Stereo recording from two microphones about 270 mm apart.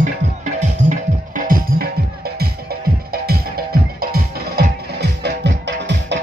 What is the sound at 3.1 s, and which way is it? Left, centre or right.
Music, right.